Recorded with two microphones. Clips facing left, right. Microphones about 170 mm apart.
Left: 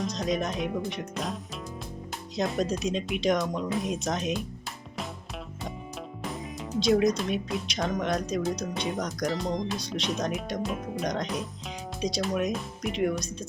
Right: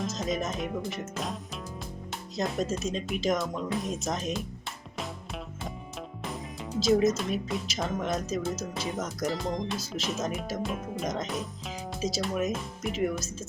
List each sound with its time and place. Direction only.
0.0 s speech: centre (ahead or behind)
6.2 s speech: centre (ahead or behind)